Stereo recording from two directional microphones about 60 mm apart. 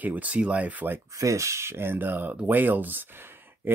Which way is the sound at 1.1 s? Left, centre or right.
Right.